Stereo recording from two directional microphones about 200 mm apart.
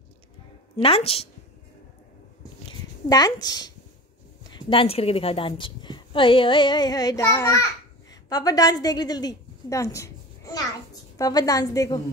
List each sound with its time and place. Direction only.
0.7 s a woman's voice: 25° left (ahead or behind)
3.1 s a woman's voice: 20° left (ahead or behind)